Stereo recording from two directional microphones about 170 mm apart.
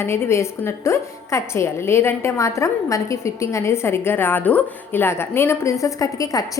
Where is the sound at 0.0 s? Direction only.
15° left (ahead or behind).